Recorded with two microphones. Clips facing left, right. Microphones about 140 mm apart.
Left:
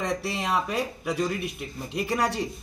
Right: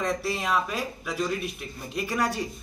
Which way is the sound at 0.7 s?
15° left (ahead or behind).